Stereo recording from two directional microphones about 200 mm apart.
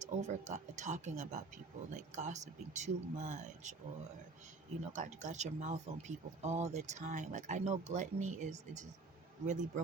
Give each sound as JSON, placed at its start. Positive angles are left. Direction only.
{"t": 0.0, "sound": "speech", "side_deg": -35}
{"t": 4.8, "sound": "speech", "side_deg": -35}